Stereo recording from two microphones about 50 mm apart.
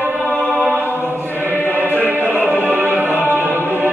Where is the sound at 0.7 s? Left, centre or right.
Right.